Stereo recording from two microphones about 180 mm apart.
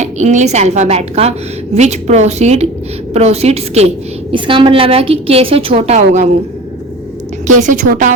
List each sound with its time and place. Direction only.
0.0 s a woman's voice: 40° right (ahead or behind)
7.4 s a woman's voice: 45° right (ahead or behind)